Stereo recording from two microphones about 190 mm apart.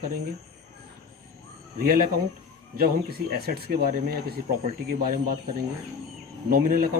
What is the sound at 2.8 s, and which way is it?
Speech, 55° right (ahead or behind).